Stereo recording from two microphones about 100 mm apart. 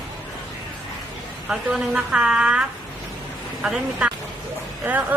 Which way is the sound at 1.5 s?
5° right (ahead or behind).